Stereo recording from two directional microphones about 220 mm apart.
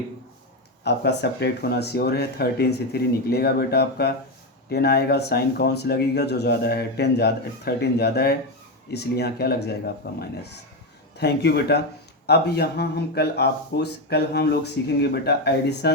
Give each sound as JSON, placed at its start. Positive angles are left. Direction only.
{"t": 0.9, "sound": "speech", "side_deg": 50}